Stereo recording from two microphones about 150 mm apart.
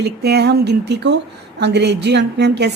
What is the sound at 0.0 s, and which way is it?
A woman's voice, 90° right.